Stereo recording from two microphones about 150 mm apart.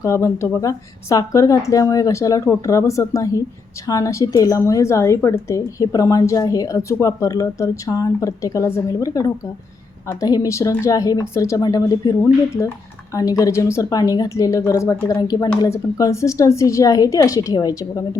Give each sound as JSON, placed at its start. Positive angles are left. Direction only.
{"t": 0.0, "sound": "a woman's voice", "side_deg": 20}